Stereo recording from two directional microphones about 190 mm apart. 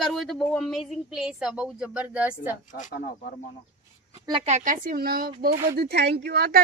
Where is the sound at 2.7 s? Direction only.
40° left (ahead or behind).